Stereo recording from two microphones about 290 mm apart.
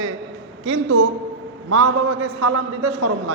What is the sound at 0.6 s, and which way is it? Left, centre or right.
A man's voice, right.